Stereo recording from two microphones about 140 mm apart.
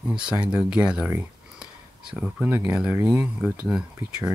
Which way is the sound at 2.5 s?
20° right (ahead or behind).